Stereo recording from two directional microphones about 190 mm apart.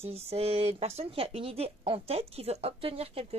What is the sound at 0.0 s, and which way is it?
Speech, 30° right (ahead or behind).